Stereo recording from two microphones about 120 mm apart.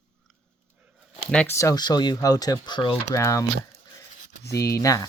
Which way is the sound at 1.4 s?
25° left (ahead or behind).